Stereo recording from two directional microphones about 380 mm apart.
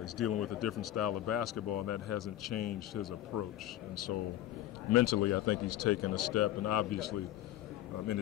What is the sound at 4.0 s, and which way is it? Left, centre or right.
A man's voice, left.